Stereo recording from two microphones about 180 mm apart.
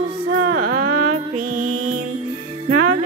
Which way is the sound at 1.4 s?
50° right (ahead or behind).